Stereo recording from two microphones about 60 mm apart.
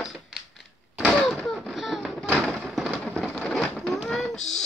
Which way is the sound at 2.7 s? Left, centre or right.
Centre.